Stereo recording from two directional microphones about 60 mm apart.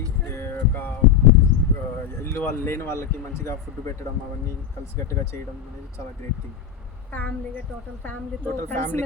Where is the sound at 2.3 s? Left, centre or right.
Left.